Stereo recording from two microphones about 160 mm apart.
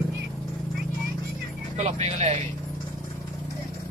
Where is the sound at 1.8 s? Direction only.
45° right (ahead or behind).